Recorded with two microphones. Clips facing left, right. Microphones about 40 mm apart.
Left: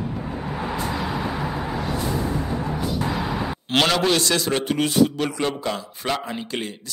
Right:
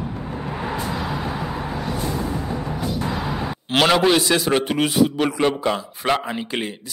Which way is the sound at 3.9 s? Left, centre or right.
Centre.